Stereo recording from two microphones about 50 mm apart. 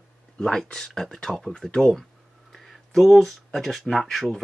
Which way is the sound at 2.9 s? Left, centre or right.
Centre.